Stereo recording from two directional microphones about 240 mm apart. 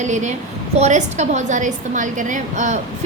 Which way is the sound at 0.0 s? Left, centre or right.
Right.